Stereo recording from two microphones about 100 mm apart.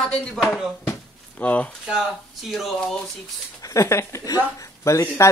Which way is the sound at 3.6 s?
35° left (ahead or behind).